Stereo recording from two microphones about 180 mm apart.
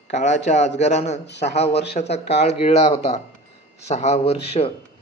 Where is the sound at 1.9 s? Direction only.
35° left (ahead or behind).